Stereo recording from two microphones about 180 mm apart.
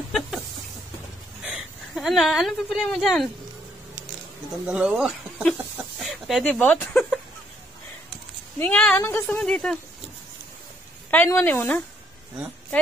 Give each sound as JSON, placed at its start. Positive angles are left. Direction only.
{"t": 1.4, "sound": "speech", "side_deg": 0}
{"t": 4.6, "sound": "speech", "side_deg": -5}
{"t": 8.5, "sound": "speech", "side_deg": 10}
{"t": 11.1, "sound": "speech", "side_deg": 10}